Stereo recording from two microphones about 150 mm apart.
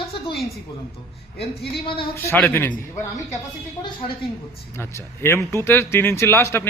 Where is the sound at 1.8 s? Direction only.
35° left (ahead or behind).